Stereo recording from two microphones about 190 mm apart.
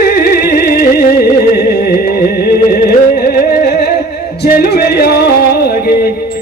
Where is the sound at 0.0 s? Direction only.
50° left (ahead or behind).